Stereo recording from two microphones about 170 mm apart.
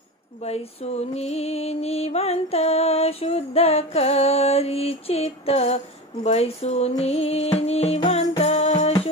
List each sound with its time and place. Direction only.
0.4 s music: 40° left (ahead or behind)